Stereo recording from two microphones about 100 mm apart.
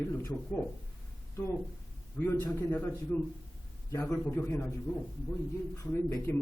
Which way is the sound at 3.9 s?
25° left (ahead or behind).